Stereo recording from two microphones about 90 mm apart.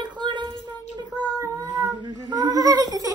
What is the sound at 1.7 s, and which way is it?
Speech, 50° right (ahead or behind).